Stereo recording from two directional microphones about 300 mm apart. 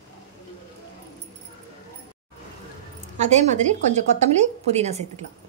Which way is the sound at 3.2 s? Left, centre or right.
Right.